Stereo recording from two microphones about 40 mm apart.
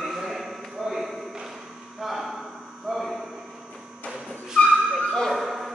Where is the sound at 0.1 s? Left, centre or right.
Centre.